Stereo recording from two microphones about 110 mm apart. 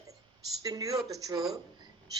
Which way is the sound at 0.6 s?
35° right (ahead or behind).